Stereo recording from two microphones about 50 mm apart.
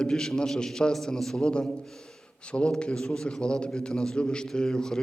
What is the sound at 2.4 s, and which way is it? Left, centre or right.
A man's voice, left.